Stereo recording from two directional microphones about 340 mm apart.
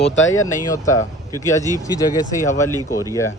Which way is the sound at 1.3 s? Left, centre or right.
Centre.